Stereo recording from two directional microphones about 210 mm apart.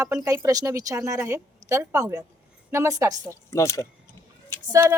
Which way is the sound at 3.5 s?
15° left (ahead or behind).